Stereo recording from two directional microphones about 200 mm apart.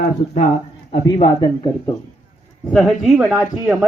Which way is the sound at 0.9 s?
25° left (ahead or behind).